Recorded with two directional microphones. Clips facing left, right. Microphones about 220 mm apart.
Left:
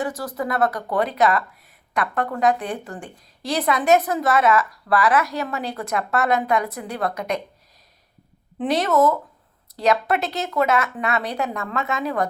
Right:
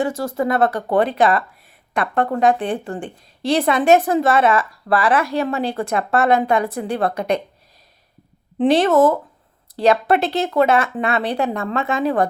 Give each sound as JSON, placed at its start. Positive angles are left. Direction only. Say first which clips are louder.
{"t": 0.0, "sound": "a woman's voice", "louder": "right 6 dB", "side_deg": -25}
{"t": 8.5, "sound": "a woman's voice", "louder": "right 5 dB", "side_deg": -30}